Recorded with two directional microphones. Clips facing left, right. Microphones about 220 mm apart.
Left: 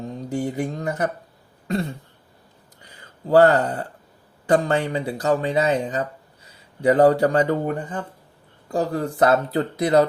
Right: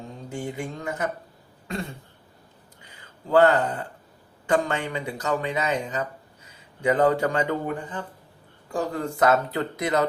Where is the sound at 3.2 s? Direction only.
40° left (ahead or behind).